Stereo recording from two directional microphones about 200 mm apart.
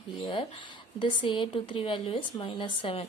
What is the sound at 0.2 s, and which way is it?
Speech, 25° left (ahead or behind).